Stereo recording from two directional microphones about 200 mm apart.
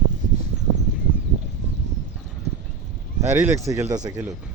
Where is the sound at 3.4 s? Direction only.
15° right (ahead or behind).